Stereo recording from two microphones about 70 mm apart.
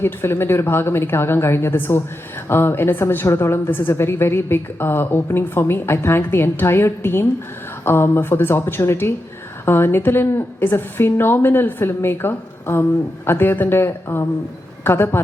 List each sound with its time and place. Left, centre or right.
0.0 s a woman's voice: left